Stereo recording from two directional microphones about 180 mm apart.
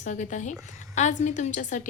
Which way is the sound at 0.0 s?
40° left (ahead or behind).